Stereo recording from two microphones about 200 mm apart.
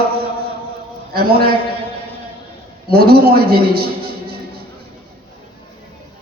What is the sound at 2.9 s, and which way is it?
Speech, 50° right (ahead or behind).